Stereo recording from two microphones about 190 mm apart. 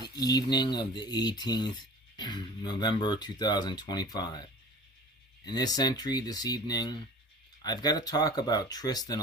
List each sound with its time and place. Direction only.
0.2 s speech: 20° left (ahead or behind)
5.5 s speech: 20° left (ahead or behind)